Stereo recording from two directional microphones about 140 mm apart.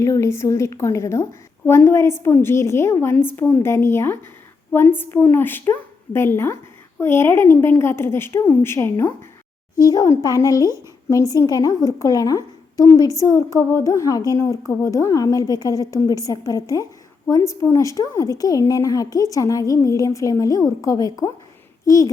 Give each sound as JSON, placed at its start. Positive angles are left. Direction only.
{"t": 0.0, "sound": "a woman's voice", "side_deg": 20}